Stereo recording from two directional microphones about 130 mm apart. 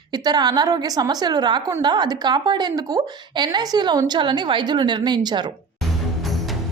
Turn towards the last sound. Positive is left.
turn(degrees=-35)  # may be behind; listen again after turning